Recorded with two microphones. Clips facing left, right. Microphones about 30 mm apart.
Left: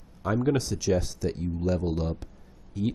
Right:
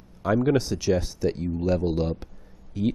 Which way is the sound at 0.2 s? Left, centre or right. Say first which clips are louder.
Right 4 dB; centre.